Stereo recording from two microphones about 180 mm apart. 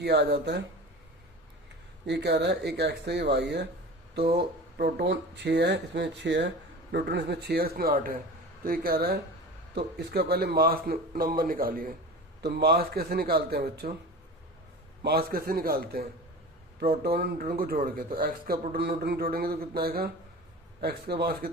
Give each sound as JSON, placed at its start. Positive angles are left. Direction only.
{"t": 0.0, "sound": "speech", "side_deg": -65}
{"t": 2.0, "sound": "speech", "side_deg": -70}
{"t": 12.4, "sound": "speech", "side_deg": -65}
{"t": 15.0, "sound": "speech", "side_deg": -60}